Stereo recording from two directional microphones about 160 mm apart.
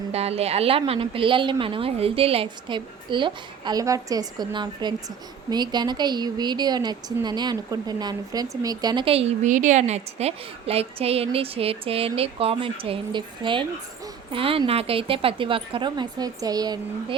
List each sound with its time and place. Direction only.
0.1 s a woman's voice: 40° right (ahead or behind); by 17.2 s 25° right (ahead or behind)